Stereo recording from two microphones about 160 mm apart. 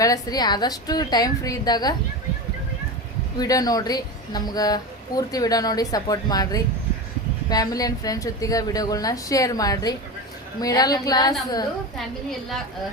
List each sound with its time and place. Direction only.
0.0 s a woman's voice: 20° left (ahead or behind)
3.3 s a woman's voice: 25° left (ahead or behind)